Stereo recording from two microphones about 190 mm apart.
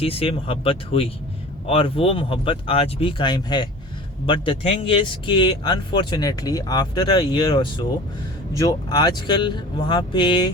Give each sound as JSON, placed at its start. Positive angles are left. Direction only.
{"t": 0.0, "sound": "speech", "side_deg": 30}